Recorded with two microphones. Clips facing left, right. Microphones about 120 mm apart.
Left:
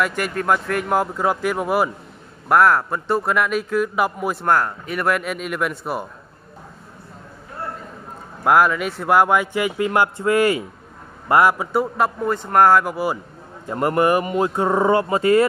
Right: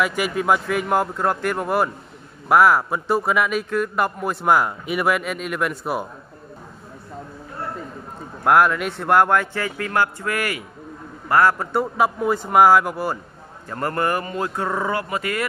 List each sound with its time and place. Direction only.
0.0 s speech: 5° right (ahead or behind)
4.5 s speech: 10° right (ahead or behind)
8.5 s a man's voice: centre (ahead or behind)
13.7 s speech: 20° left (ahead or behind)